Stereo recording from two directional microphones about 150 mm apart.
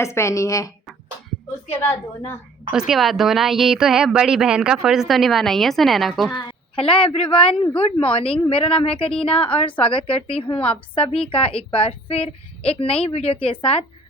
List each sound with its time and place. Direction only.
0.0 s a woman's voice: 20° left (ahead or behind)
2.7 s speech: 5° right (ahead or behind)
6.3 s a woman's voice: 35° left (ahead or behind)